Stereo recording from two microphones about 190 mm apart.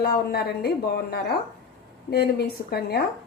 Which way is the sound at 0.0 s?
55° left (ahead or behind).